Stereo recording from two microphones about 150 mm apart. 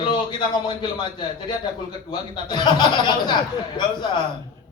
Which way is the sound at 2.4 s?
30° left (ahead or behind).